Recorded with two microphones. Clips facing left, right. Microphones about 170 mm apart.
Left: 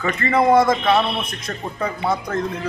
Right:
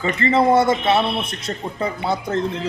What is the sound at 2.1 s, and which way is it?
Speech, 25° right (ahead or behind).